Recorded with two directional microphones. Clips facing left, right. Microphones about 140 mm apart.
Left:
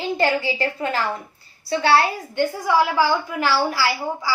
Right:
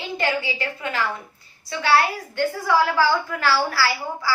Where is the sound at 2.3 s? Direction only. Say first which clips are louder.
Left 1 dB; 20° left (ahead or behind).